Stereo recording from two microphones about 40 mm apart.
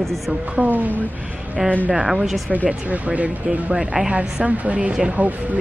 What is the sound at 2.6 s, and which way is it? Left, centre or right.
Speech, right.